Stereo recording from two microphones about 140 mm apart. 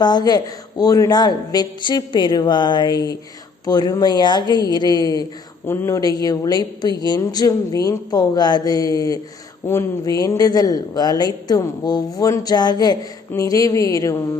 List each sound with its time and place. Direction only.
0.0 s a woman's voice: 30° left (ahead or behind)
5.6 s a woman's voice: 20° left (ahead or behind)